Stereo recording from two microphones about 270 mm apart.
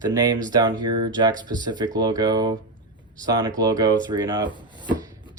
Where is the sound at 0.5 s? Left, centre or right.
Centre.